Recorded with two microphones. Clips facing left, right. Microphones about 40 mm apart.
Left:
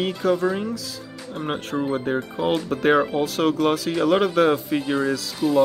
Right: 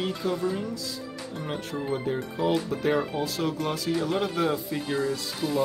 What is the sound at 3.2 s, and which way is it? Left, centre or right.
Speech, left.